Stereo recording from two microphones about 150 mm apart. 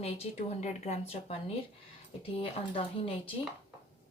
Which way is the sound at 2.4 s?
40° left (ahead or behind).